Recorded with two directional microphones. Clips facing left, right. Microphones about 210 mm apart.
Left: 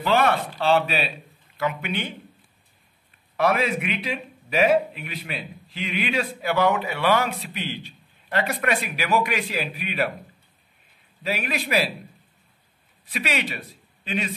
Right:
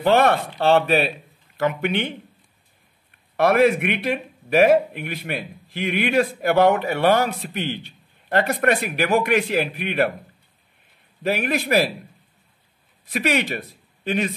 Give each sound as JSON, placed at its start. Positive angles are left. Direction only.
{"t": 0.0, "sound": "a man's voice", "side_deg": -55}
{"t": 3.3, "sound": "a man's voice", "side_deg": -60}
{"t": 11.2, "sound": "a man's voice", "side_deg": -50}
{"t": 13.1, "sound": "speech", "side_deg": -50}